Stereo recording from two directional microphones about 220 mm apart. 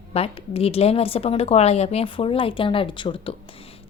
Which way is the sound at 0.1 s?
25° left (ahead or behind).